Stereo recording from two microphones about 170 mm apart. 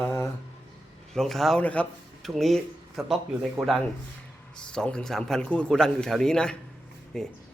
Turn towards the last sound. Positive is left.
turn(degrees=0)  # may be behind; listen again after turning